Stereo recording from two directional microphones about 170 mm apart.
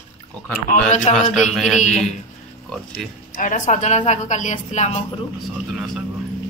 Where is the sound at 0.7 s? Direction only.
50° left (ahead or behind).